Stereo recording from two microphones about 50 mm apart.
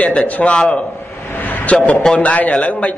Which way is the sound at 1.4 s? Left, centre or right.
Left.